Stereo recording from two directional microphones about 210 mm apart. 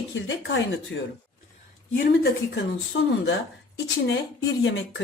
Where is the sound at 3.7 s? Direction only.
60° left (ahead or behind).